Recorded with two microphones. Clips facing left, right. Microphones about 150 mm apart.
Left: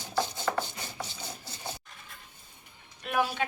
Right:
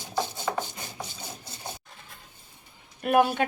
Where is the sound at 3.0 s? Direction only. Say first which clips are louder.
Right 7 dB; 55° right (ahead or behind).